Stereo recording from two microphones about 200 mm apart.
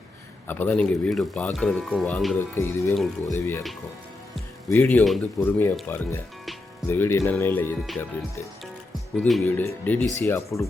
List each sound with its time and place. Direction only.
0.4 s speech: 10° left (ahead or behind)
2.6 s speech: 15° left (ahead or behind)
2.9 s speech: centre (ahead or behind)
4.7 s speech: 10° left (ahead or behind)
9.1 s speech: 5° left (ahead or behind)